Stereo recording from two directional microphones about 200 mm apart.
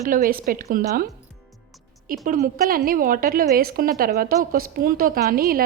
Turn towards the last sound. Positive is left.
turn(degrees=-45)  # may be behind; listen again after turning